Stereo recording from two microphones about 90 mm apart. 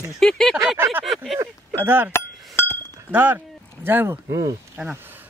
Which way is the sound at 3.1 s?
25° right (ahead or behind).